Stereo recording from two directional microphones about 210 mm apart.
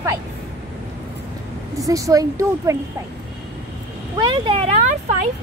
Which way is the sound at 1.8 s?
15° right (ahead or behind).